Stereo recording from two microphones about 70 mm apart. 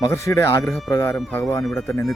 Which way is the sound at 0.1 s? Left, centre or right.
Left.